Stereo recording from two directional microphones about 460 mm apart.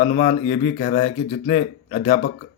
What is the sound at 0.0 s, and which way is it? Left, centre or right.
Speech, centre.